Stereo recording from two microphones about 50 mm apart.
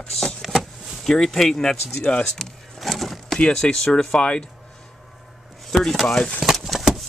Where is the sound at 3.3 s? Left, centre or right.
Centre.